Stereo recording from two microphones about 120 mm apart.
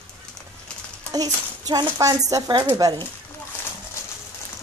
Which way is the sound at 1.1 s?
30° right (ahead or behind).